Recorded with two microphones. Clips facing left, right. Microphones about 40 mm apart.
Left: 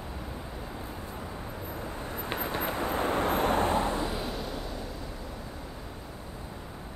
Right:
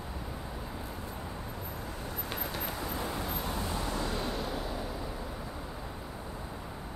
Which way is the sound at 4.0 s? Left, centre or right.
Centre.